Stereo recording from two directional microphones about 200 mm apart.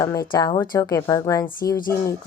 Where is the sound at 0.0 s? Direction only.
15° left (ahead or behind).